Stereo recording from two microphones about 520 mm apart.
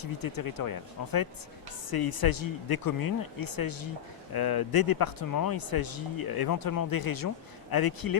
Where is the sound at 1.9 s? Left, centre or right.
Left.